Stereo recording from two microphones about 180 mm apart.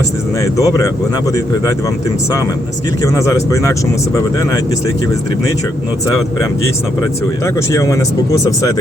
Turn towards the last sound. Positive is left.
turn(degrees=20)  # may be behind; listen again after turning